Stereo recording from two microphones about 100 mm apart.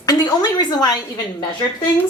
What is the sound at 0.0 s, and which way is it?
A woman's voice, 45° left (ahead or behind).